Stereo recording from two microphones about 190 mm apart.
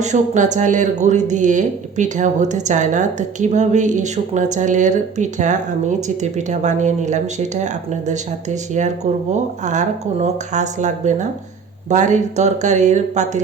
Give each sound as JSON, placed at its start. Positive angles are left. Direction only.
{"t": 0.0, "sound": "speech", "side_deg": -40}